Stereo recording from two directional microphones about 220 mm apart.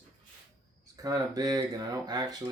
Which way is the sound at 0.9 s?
15° right (ahead or behind).